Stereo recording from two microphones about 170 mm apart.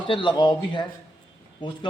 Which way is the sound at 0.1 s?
30° left (ahead or behind).